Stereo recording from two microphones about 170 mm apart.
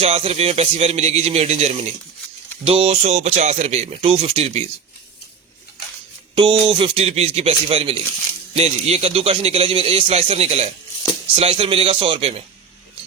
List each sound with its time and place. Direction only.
0.0 s a man's voice: 35° right (ahead or behind)
6.3 s a man's voice: 30° right (ahead or behind)